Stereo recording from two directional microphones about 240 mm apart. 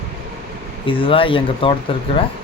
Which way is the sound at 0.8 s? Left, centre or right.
Left.